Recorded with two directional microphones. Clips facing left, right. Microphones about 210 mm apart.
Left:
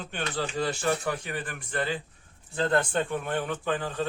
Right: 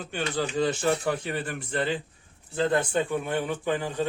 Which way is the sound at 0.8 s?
25° right (ahead or behind).